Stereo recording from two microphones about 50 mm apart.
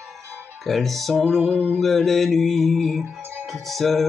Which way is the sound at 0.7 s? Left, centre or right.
Centre.